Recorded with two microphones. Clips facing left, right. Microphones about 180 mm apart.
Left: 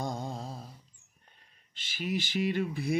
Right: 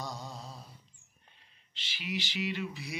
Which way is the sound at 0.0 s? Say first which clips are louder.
Left 6 dB; 50° left (ahead or behind).